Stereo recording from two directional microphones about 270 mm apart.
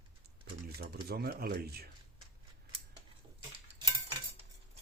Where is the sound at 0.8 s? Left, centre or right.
Right.